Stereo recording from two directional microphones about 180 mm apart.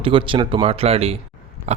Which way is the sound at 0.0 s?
30° right (ahead or behind).